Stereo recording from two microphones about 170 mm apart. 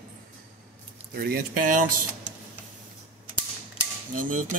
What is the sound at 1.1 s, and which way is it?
Speech, 65° right (ahead or behind).